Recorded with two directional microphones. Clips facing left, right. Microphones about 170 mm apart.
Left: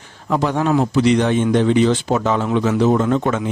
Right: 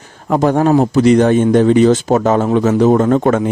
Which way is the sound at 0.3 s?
45° right (ahead or behind).